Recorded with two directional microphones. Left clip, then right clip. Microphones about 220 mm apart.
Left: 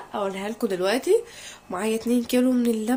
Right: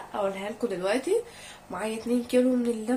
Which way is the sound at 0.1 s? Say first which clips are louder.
Left 2 dB; 50° left (ahead or behind).